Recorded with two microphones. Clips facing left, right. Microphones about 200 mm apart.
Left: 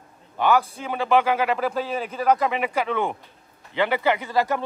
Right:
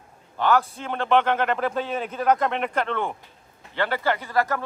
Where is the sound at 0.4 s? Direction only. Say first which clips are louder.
Left 1 dB; 5° left (ahead or behind).